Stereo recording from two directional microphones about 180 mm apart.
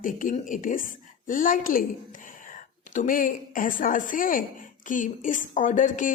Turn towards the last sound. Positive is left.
turn(degrees=45)  # may be behind; listen again after turning